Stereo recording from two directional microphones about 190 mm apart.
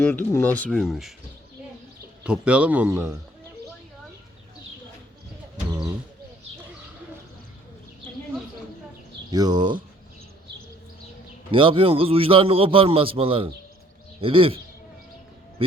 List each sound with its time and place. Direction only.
0.1 s speech: 10° left (ahead or behind)
2.2 s speech: 5° right (ahead or behind)
9.3 s a man's voice: 20° right (ahead or behind)
11.5 s a man's voice: 30° right (ahead or behind)